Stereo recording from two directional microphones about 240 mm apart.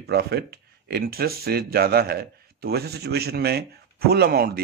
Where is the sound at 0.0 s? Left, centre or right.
Right.